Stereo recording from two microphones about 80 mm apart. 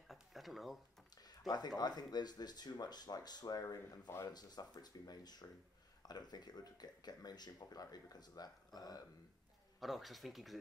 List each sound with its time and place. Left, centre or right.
0.1 s a sound: centre
1.1 s a sound: left
1.8 s speech: left
3.6 s speech: left
4.3 s speech: left
9.8 s speech: centre